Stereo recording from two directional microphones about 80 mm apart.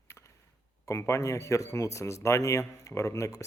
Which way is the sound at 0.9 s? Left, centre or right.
Left.